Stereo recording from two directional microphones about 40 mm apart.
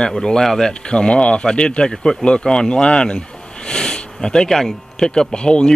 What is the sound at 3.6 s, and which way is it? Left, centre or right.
Sniff, centre.